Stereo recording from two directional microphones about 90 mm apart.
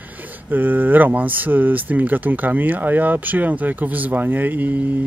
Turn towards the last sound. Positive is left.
turn(degrees=-20)  # may be behind; listen again after turning